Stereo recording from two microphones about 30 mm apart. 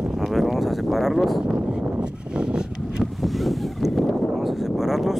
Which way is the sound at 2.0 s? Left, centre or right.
Right.